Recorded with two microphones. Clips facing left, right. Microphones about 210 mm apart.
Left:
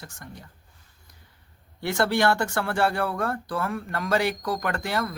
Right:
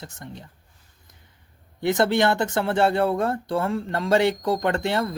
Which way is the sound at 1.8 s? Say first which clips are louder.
Right 3 dB; 20° right (ahead or behind).